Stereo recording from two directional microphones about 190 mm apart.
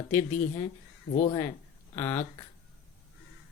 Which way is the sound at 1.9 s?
10° left (ahead or behind).